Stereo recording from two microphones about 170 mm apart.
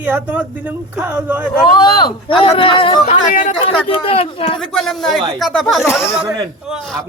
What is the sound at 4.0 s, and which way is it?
Speech, 35° left (ahead or behind).